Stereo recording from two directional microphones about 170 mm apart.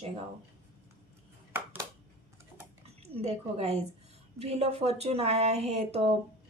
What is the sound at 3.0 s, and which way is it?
A woman's voice, 40° right (ahead or behind).